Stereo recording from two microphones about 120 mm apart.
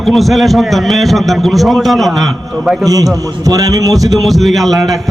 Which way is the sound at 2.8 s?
30° right (ahead or behind).